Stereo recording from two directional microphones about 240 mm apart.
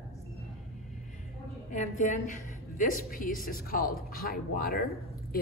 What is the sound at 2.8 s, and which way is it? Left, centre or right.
Speech, left.